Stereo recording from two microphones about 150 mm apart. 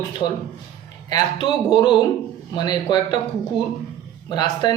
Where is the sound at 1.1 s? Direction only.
30° left (ahead or behind).